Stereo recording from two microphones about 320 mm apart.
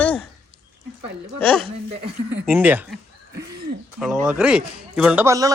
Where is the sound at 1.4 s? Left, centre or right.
Centre.